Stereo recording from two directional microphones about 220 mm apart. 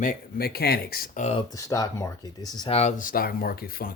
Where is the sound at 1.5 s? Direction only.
15° left (ahead or behind).